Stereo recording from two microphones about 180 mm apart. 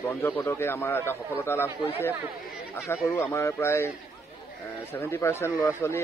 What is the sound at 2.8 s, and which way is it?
A man's voice, 15° left (ahead or behind).